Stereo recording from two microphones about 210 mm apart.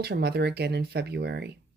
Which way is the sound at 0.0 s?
50° right (ahead or behind).